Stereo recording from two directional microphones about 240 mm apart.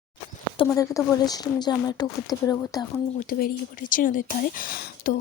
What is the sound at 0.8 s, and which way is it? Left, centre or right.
Speech, centre.